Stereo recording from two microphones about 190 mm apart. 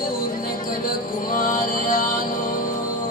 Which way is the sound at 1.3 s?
45° left (ahead or behind).